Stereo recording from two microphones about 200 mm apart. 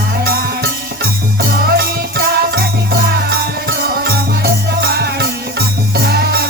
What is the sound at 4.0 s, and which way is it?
Music, 55° right (ahead or behind).